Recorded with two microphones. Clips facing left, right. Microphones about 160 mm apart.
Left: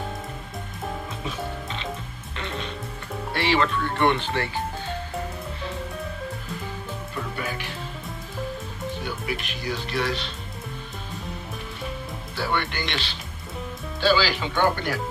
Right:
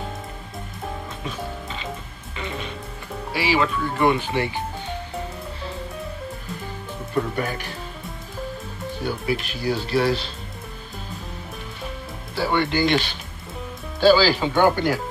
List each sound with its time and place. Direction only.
1.2 s music: centre (ahead or behind)
3.3 s speech: 5° right (ahead or behind)
4.3 s music: 15° right (ahead or behind)
7.2 s speech: 45° right (ahead or behind)
9.0 s speech: 35° right (ahead or behind)
12.4 s speech: 30° right (ahead or behind)
12.9 s speech: 50° right (ahead or behind)